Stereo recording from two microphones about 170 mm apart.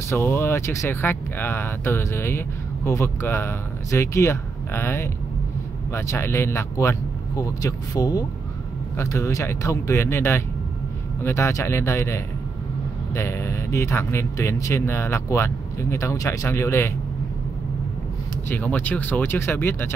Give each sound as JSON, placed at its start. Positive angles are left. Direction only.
{"t": 0.1, "sound": "speech", "side_deg": 15}
{"t": 18.5, "sound": "speech", "side_deg": 10}